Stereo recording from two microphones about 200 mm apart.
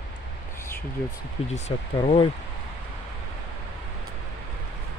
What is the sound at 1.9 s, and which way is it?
Speech, 25° left (ahead or behind).